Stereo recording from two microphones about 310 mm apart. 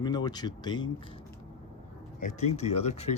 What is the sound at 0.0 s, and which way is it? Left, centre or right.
Speech, centre.